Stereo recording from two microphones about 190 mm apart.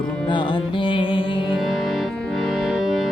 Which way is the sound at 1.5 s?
Centre (ahead or behind).